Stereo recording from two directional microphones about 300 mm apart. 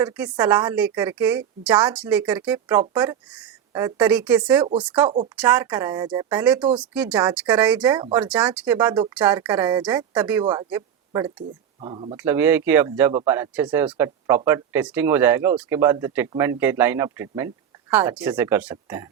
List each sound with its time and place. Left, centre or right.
0.0 s speech: centre
7.9 s speech: centre
8.2 s speech: centre
12.1 s speech: centre